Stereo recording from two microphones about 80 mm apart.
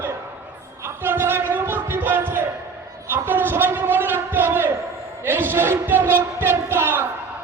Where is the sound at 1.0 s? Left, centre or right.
Right.